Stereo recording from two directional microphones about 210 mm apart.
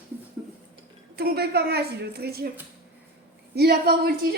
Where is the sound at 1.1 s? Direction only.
50° right (ahead or behind).